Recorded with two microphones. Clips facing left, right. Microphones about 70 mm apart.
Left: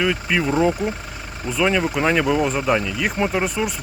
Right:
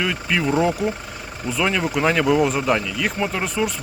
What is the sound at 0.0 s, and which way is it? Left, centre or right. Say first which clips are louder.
Speech: left 2 dB; centre.